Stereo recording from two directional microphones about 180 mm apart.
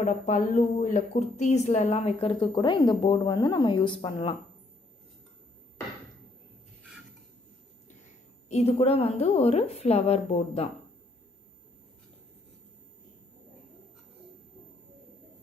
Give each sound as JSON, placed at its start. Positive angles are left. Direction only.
{"t": 0.0, "sound": "a woman's voice", "side_deg": 45}
{"t": 8.5, "sound": "a woman's voice", "side_deg": 35}